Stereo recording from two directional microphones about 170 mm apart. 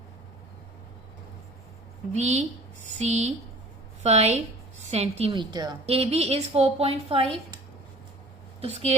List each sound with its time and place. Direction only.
2.1 s a woman's voice: 40° right (ahead or behind)
5.8 s a woman's voice: 35° right (ahead or behind)
8.6 s a woman's voice: 40° right (ahead or behind)